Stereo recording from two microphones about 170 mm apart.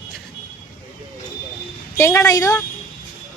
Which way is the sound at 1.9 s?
15° left (ahead or behind).